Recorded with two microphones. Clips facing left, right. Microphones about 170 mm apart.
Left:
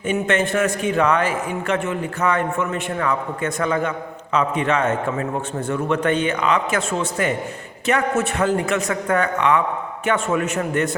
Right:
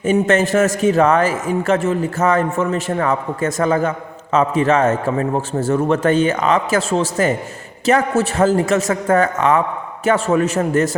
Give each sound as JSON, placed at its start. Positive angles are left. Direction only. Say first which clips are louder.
{"t": 0.0, "sound": "a man's voice", "louder": "right 5 dB", "side_deg": -40}